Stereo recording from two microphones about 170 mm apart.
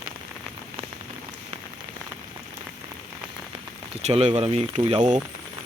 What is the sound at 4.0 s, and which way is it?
Speech, 40° right (ahead or behind).